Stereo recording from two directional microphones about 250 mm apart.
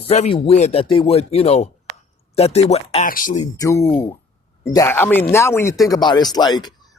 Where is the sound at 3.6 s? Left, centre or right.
Centre.